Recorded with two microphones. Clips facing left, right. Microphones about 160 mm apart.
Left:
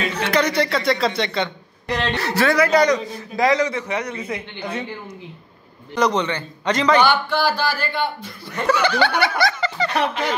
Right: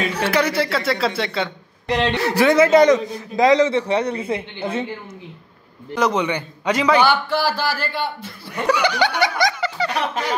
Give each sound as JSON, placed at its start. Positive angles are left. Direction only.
{"t": 0.1, "sound": "speech", "side_deg": -10}
{"t": 1.9, "sound": "a man's voice", "side_deg": -20}
{"t": 5.9, "sound": "a man's voice", "side_deg": -5}